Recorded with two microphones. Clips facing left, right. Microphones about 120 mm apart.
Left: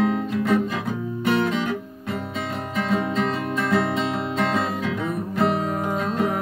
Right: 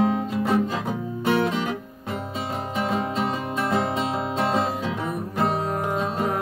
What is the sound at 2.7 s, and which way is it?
Music, 20° right (ahead or behind).